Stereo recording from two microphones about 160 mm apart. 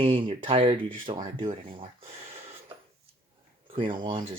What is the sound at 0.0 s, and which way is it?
Speech, 35° right (ahead or behind).